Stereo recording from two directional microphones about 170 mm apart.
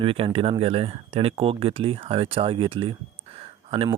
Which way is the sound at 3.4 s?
35° right (ahead or behind).